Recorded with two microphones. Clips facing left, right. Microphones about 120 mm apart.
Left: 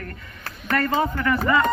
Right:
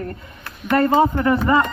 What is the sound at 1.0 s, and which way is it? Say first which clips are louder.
Speech: right 6 dB; 30° right (ahead or behind).